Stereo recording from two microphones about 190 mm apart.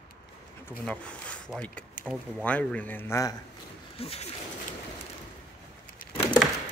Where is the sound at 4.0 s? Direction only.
30° left (ahead or behind).